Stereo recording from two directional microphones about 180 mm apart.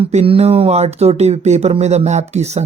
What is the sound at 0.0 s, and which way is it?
Speech, 35° right (ahead or behind).